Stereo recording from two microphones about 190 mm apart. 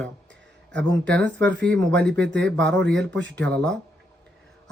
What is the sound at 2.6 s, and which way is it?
Speech, 70° right (ahead or behind).